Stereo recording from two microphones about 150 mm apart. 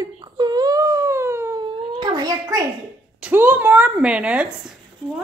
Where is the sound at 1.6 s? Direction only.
30° right (ahead or behind).